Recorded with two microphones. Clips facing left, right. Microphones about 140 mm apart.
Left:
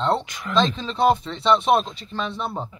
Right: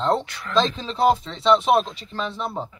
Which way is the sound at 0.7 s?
5° right (ahead or behind).